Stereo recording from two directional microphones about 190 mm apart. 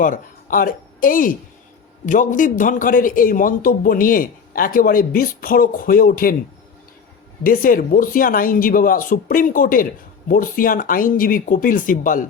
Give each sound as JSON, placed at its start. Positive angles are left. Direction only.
{"t": 0.0, "sound": "speech", "side_deg": 45}
{"t": 7.4, "sound": "speech", "side_deg": 45}